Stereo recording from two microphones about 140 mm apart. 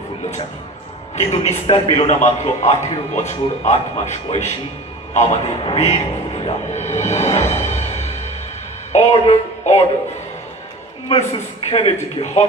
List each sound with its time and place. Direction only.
1.1 s a man's voice: 50° left (ahead or behind)
11.1 s a man's voice: 50° left (ahead or behind)